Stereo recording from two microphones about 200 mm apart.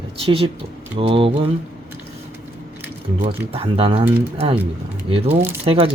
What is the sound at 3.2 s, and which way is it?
Speech, 30° right (ahead or behind).